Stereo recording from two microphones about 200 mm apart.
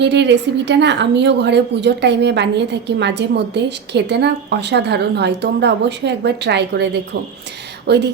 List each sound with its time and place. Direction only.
0.0 s a woman's voice: 60° right (ahead or behind)